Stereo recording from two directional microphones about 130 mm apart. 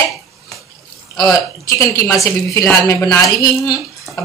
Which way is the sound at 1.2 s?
25° left (ahead or behind).